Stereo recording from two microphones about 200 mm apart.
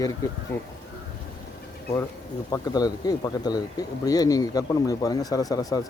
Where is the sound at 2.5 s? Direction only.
20° left (ahead or behind).